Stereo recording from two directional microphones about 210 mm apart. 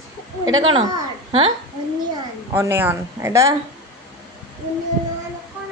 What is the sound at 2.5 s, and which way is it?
A woman's voice, 10° right (ahead or behind).